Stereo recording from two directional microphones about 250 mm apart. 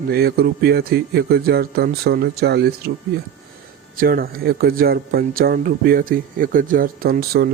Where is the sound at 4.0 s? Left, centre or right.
Right.